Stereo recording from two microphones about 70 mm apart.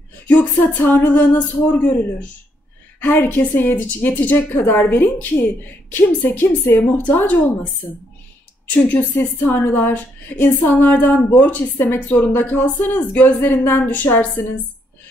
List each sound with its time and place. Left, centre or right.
0.3 s a woman's voice: left
3.0 s a woman's voice: left
8.6 s a woman's voice: left